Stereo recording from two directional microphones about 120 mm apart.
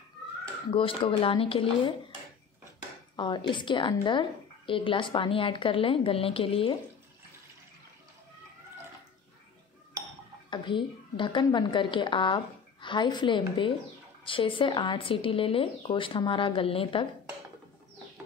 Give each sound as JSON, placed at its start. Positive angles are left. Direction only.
{"t": 0.7, "sound": "speech", "side_deg": 50}
{"t": 3.2, "sound": "a woman's voice", "side_deg": 40}
{"t": 10.5, "sound": "a woman's voice", "side_deg": 40}